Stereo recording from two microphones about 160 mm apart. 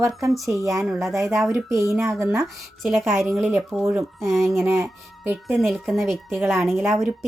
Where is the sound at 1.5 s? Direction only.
20° right (ahead or behind).